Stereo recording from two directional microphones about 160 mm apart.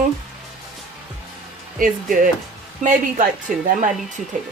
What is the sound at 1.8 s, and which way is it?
A woman's voice, 60° right (ahead or behind).